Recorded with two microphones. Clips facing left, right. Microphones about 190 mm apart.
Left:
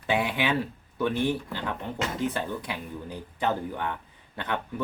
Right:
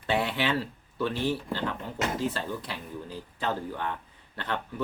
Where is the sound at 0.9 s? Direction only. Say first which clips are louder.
Left 2 dB; 20° left (ahead or behind).